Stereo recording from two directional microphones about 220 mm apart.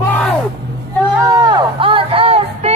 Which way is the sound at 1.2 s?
15° right (ahead or behind).